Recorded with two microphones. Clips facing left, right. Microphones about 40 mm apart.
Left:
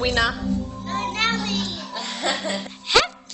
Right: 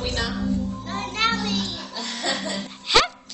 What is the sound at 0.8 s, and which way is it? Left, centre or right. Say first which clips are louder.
Music: left 3 dB; centre.